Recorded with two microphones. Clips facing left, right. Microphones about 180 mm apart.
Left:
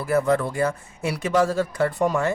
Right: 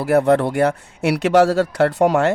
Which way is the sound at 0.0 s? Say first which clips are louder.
Right 6 dB; 70° right (ahead or behind).